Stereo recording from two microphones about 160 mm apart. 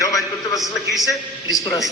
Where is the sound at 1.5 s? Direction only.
20° left (ahead or behind).